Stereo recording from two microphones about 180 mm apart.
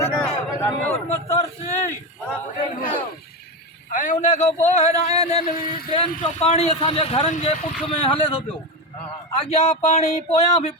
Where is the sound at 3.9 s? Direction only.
45° left (ahead or behind).